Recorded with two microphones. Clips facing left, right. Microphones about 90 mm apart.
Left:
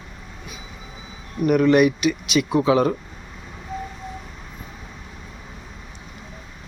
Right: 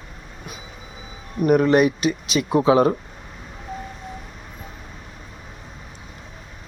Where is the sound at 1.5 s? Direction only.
35° right (ahead or behind).